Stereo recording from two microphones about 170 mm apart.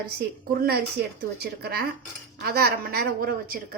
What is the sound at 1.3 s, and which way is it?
A woman's voice, 65° right (ahead or behind).